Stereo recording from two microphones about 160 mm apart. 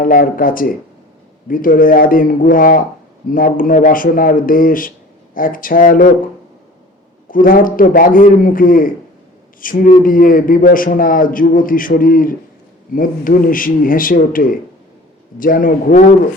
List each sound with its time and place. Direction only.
0.0 s a man's voice: 60° left (ahead or behind)
7.3 s a man's voice: 60° left (ahead or behind)